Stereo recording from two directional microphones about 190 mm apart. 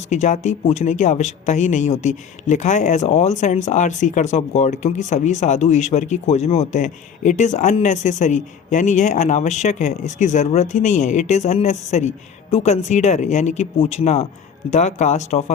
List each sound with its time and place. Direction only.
0.1 s speech: 40° left (ahead or behind)